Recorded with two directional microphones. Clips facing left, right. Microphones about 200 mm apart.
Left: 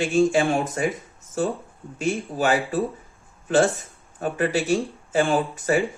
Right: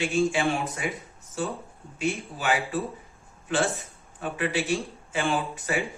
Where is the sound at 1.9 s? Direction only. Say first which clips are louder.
Left 4 dB; 40° left (ahead or behind).